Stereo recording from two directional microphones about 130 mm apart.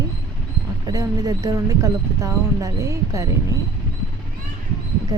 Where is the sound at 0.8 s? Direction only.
30° right (ahead or behind).